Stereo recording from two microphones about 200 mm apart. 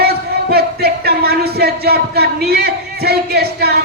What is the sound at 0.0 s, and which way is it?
Speech, 50° right (ahead or behind).